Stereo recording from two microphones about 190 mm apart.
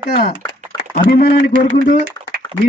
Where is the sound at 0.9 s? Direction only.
55° left (ahead or behind).